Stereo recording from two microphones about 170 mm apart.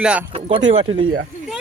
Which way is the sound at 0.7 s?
35° right (ahead or behind).